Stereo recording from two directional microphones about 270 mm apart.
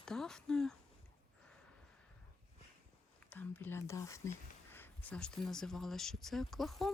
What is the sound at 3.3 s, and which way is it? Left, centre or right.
Speech, centre.